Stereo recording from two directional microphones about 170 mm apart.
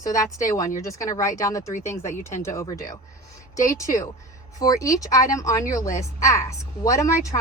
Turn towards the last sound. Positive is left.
turn(degrees=20)  # may be behind; listen again after turning